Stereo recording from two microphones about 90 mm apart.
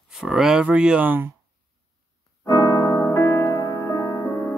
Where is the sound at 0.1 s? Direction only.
5° right (ahead or behind); by 1.3 s 20° right (ahead or behind).